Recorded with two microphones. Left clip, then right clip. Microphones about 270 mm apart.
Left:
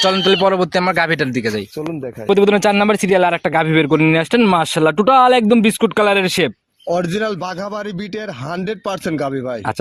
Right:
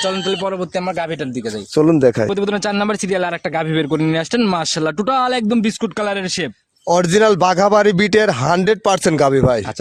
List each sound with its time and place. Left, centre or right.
0.0 s a man's voice: left
1.9 s speech: right
2.3 s speech: centre
6.9 s speech: right